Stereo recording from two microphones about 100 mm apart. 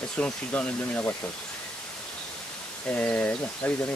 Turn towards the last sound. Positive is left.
turn(degrees=15)  # may be behind; listen again after turning